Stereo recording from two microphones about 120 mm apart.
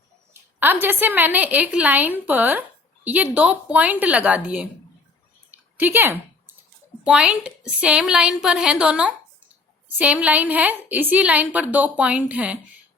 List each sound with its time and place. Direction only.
0.6 s a woman's voice: 15° right (ahead or behind)
5.5 s a sound: 15° right (ahead or behind)
7.0 s a woman's voice: 10° right (ahead or behind)